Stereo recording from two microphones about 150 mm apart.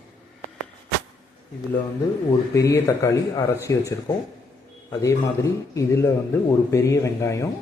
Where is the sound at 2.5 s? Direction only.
20° left (ahead or behind).